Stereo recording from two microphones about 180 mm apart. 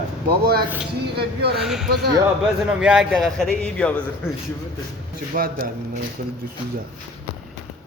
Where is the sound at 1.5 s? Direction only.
Centre (ahead or behind).